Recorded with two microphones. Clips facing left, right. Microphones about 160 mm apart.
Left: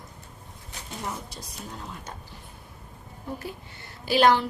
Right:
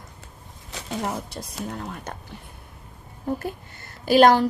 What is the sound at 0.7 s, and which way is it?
Speech, 80° right.